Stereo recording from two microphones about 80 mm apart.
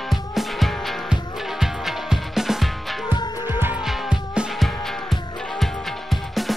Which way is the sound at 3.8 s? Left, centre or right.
Centre.